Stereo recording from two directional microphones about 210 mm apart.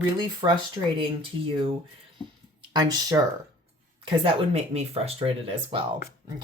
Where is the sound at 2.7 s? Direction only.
20° right (ahead or behind).